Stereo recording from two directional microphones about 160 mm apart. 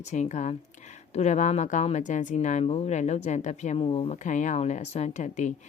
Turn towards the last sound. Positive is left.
turn(degrees=50)  # may be behind; listen again after turning